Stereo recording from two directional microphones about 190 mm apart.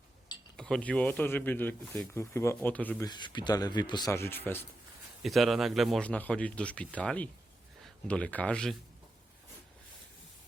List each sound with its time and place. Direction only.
0.5 s speech: 5° left (ahead or behind)
3.1 s speech: 25° left (ahead or behind)
5.2 s a man's voice: centre (ahead or behind)